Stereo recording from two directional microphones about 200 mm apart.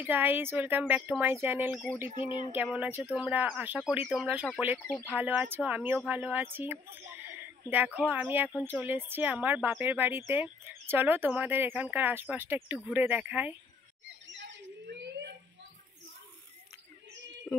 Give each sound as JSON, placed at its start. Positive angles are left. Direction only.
{"t": 0.0, "sound": "speech", "side_deg": -10}
{"t": 2.0, "sound": "a sound", "side_deg": 25}
{"t": 2.5, "sound": "speech", "side_deg": -5}
{"t": 4.7, "sound": "speech", "side_deg": 5}
{"t": 5.1, "sound": "speech", "side_deg": -10}
{"t": 14.2, "sound": "a sound", "side_deg": -60}